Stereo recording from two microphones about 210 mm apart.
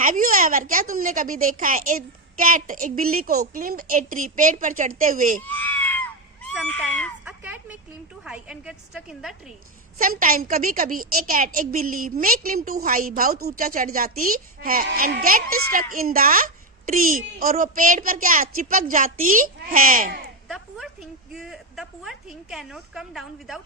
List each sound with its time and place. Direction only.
0.0 s a woman's voice: 40° right (ahead or behind)
5.4 s a sound: 10° left (ahead or behind)
6.5 s cat: 5° left (ahead or behind)
7.3 s a sound: 5° right (ahead or behind)
8.2 s a woman's voice: 5° right (ahead or behind)
10.0 s a woman's voice: 40° right (ahead or behind)
20.5 s a woman's voice: centre (ahead or behind)